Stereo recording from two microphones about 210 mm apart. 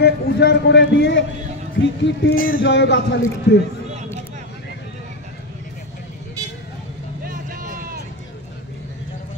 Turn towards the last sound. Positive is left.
turn(degrees=-40)  # may be behind; listen again after turning